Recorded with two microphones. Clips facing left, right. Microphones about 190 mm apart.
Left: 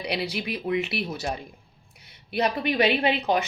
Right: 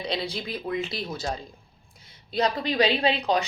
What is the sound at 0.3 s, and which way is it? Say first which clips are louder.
Speech: left 3 dB; 70° left (ahead or behind).